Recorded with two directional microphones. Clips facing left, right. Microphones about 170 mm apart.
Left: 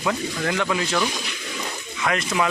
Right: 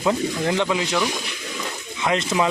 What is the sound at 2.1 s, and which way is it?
Speech, 25° right (ahead or behind).